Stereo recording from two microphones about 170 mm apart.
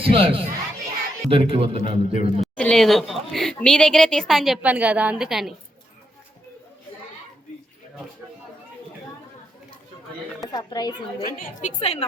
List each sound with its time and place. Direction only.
0.0 s a man's voice: 30° right (ahead or behind)
2.4 s a woman's voice: 5° left (ahead or behind)
10.4 s speech: 20° left (ahead or behind)
11.3 s a woman's voice: 55° left (ahead or behind)
11.8 s a woman's voice: 40° left (ahead or behind)